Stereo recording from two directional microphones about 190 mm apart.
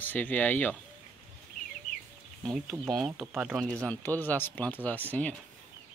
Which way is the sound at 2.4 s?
Centre (ahead or behind).